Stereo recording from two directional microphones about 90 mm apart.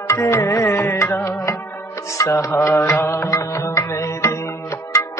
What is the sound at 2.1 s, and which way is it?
Music, 35° left (ahead or behind).